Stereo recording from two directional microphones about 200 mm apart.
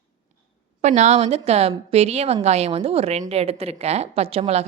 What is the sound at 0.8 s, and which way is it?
A woman's voice, 35° right (ahead or behind).